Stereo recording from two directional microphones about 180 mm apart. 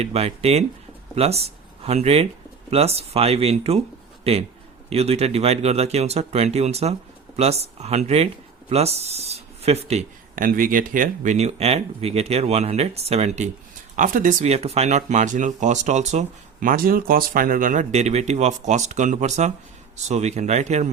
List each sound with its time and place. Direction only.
0.0 s a man's voice: 35° right (ahead or behind)
13.9 s speech: 50° right (ahead or behind)